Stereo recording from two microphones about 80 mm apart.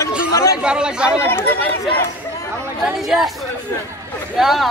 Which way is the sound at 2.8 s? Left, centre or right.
Centre.